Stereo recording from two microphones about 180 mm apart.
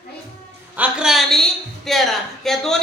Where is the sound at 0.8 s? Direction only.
5° right (ahead or behind).